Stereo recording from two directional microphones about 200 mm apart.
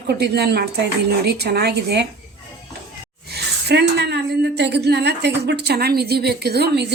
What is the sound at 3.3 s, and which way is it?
Speech, 55° right (ahead or behind).